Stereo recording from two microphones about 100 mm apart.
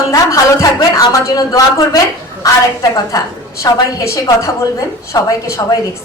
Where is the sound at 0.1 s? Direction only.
35° left (ahead or behind).